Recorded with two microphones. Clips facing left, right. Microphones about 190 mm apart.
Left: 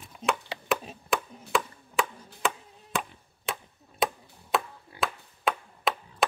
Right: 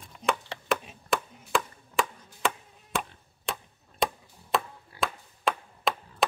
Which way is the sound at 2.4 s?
Centre (ahead or behind).